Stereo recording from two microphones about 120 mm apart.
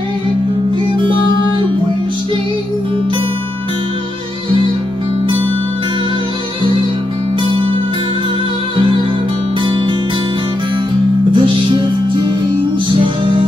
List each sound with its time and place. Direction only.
0.9 s music: 40° right (ahead or behind)
9.7 s music: 45° right (ahead or behind)
11.3 s music: 40° right (ahead or behind)